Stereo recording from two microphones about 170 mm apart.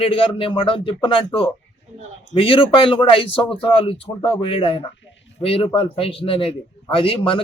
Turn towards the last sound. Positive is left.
turn(degrees=30)  # may be behind; listen again after turning